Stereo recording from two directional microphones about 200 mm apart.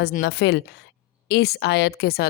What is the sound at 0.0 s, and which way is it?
A woman's voice, 55° left (ahead or behind).